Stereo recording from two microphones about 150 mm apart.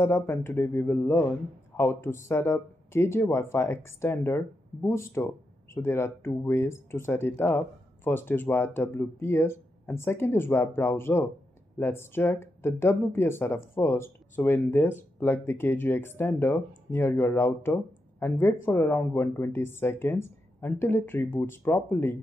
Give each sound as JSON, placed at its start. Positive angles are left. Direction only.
{"t": 0.0, "sound": "speech", "side_deg": 15}